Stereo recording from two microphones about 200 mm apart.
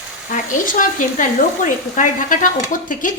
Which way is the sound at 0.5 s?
40° left (ahead or behind).